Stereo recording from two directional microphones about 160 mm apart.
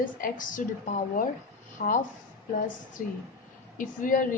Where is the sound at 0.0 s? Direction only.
55° left (ahead or behind).